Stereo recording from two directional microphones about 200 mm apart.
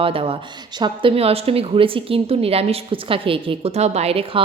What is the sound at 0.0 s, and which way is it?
A woman's voice, 30° right (ahead or behind).